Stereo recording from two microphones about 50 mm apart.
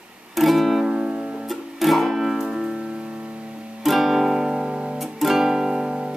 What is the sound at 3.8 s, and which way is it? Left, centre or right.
Music, centre.